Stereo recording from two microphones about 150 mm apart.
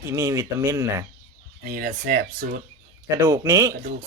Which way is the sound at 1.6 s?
70° right (ahead or behind).